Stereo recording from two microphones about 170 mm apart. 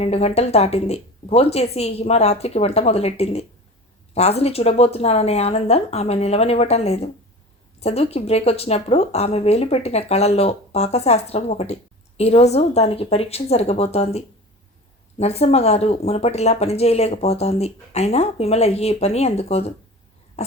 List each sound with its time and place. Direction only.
0.0 s speech: 35° left (ahead or behind)